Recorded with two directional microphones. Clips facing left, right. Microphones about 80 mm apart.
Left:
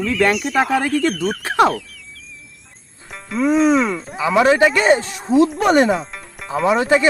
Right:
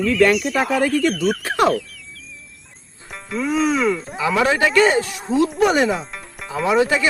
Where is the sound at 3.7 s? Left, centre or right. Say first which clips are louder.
Left 2 dB; centre.